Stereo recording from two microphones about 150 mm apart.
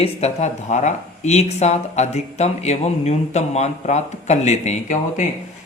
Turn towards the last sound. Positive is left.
turn(degrees=50)  # may be behind; listen again after turning